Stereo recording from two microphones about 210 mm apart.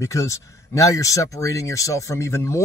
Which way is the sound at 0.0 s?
15° left (ahead or behind).